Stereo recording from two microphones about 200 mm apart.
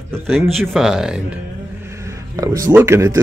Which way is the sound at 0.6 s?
Centre (ahead or behind).